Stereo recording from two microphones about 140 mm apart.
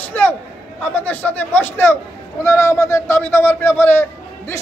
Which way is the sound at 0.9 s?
10° left (ahead or behind).